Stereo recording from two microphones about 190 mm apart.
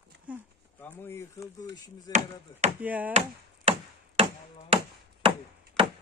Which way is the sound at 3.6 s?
30° right (ahead or behind).